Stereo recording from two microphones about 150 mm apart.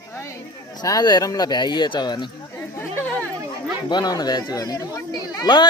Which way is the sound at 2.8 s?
15° left (ahead or behind).